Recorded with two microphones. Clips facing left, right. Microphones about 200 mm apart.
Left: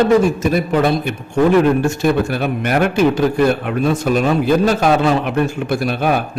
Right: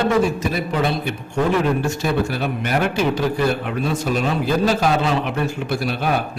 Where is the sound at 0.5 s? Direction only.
50° left (ahead or behind).